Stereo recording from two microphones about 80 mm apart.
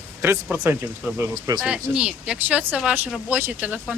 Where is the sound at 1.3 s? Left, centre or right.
Right.